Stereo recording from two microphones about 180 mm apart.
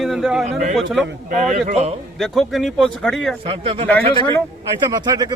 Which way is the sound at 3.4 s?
30° right (ahead or behind).